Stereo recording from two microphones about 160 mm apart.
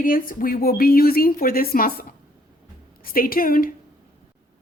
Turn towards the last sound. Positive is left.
turn(degrees=65)  # may be behind; listen again after turning